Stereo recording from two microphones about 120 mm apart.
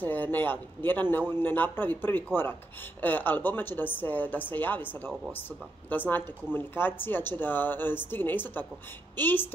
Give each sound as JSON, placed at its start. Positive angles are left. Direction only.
{"t": 0.0, "sound": "speech", "side_deg": 15}